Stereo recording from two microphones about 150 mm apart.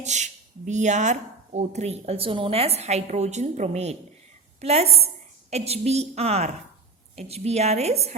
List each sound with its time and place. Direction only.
0.0 s a woman's voice: 50° right (ahead or behind)